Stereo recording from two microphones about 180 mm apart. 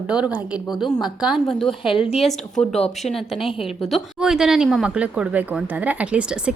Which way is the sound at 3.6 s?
Centre (ahead or behind).